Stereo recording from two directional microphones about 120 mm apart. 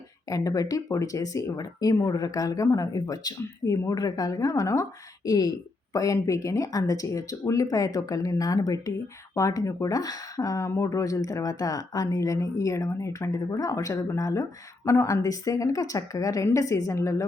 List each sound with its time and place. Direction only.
0.3 s speech: 30° left (ahead or behind)